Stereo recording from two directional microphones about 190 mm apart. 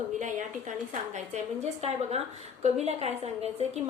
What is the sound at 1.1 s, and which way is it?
A woman's voice, 35° right (ahead or behind).